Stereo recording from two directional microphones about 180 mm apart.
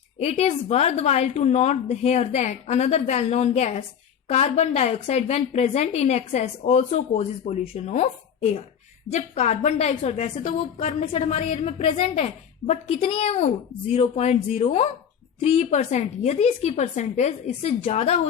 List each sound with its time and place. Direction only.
0.2 s a woman's voice: 35° left (ahead or behind)